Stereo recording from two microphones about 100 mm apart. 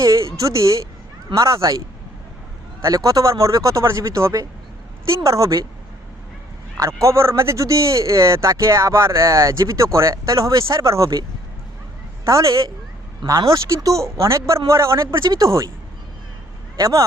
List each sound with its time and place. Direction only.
0.0 s a man's voice: 30° right (ahead or behind)
2.8 s a man's voice: 35° right (ahead or behind)
6.7 s a man's voice: 35° right (ahead or behind)
16.7 s a man's voice: 35° right (ahead or behind)